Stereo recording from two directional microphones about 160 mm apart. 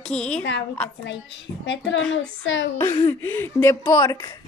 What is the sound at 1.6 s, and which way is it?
Speech, 90° left.